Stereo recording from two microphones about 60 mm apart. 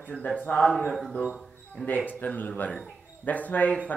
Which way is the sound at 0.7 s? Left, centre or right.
Centre.